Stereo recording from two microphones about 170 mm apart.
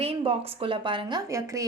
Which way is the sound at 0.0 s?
35° right (ahead or behind).